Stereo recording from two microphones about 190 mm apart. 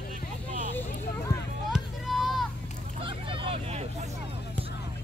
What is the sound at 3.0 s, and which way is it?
Vehicle, 25° right (ahead or behind).